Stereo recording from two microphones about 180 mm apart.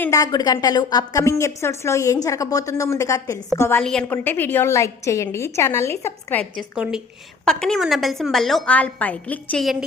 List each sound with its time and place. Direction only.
0.0 s a woman's voice: 20° left (ahead or behind)
7.4 s a woman's voice: 5° left (ahead or behind)